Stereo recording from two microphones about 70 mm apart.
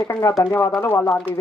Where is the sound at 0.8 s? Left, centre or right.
Left.